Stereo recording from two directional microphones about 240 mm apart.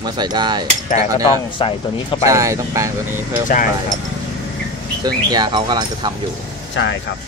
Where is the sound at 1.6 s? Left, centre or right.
Left.